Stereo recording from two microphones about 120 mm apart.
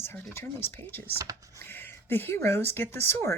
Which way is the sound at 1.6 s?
20° left (ahead or behind).